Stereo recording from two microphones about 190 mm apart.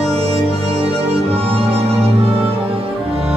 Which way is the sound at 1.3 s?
30° right (ahead or behind).